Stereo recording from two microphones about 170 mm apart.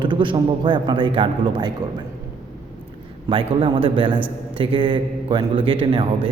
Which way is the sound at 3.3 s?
30° right (ahead or behind).